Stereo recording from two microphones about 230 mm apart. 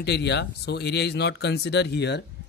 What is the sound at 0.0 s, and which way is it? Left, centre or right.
Speech, left.